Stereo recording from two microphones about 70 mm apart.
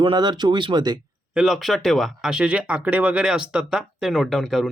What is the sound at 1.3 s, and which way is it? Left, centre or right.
Speech, centre.